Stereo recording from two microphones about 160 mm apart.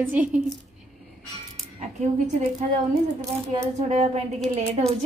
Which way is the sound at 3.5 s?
45° right (ahead or behind).